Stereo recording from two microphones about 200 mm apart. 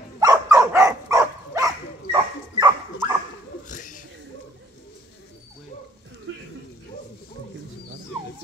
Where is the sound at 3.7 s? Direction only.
40° left (ahead or behind).